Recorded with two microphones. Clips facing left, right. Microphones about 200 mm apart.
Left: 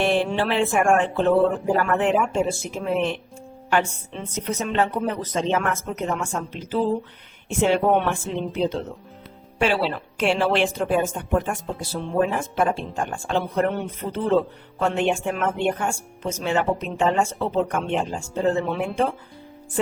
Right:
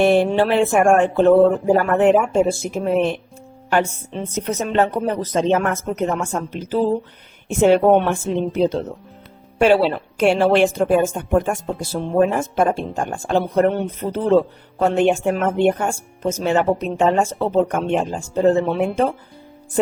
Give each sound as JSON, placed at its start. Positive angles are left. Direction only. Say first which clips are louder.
{"t": 0.0, "sound": "a woman's voice", "louder": "right 6 dB", "side_deg": -45}